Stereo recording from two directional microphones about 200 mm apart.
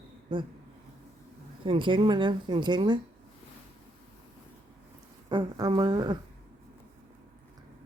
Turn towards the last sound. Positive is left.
turn(degrees=-20)  # may be behind; listen again after turning